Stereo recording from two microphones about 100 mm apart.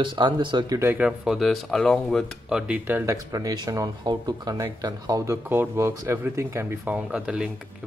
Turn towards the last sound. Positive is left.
turn(degrees=-5)  # may be behind; listen again after turning